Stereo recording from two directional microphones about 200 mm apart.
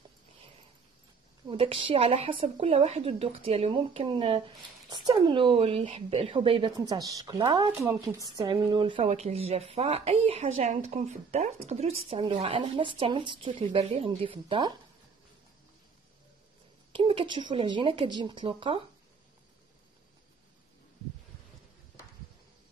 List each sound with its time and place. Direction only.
1.5 s a woman's voice: 30° right (ahead or behind)
16.9 s a woman's voice: 25° right (ahead or behind)